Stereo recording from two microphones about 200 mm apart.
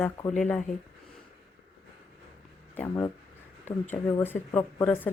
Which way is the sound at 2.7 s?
15° left (ahead or behind).